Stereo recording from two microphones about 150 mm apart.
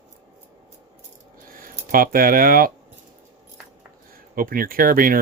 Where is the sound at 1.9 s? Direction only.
70° right (ahead or behind).